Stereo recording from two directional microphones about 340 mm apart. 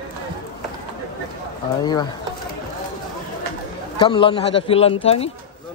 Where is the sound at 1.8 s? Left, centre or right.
Centre.